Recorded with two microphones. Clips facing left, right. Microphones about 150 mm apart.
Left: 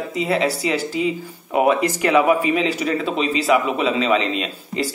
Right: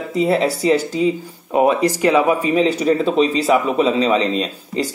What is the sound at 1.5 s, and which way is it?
Speech, 30° right (ahead or behind).